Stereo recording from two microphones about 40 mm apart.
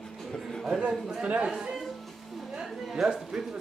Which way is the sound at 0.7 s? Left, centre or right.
Centre.